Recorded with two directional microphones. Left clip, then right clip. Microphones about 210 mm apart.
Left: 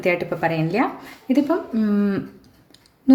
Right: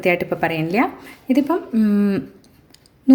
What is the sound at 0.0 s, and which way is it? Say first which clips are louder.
A woman's voice: right 2 dB; 25° right (ahead or behind).